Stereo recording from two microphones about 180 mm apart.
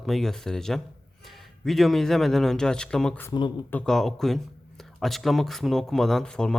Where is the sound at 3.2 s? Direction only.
25° left (ahead or behind).